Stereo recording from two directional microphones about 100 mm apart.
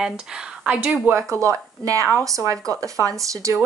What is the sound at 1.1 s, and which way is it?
Speech, 30° right (ahead or behind).